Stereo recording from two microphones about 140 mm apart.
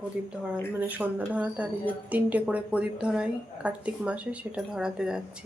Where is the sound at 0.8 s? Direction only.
10° right (ahead or behind).